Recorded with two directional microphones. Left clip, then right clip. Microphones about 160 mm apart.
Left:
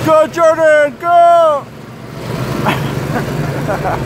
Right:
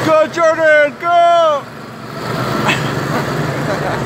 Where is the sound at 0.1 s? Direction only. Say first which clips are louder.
Left 3 dB; 20° left (ahead or behind).